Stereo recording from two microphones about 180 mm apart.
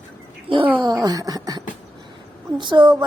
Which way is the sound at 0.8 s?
20° right (ahead or behind).